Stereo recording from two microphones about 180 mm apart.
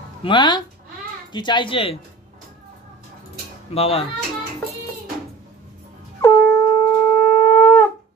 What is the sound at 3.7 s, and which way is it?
Speech, 35° left (ahead or behind).